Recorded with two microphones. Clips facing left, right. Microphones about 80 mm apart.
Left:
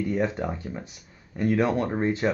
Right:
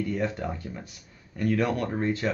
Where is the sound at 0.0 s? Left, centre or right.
Left.